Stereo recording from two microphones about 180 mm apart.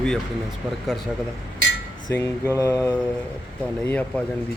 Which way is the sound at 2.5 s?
15° left (ahead or behind).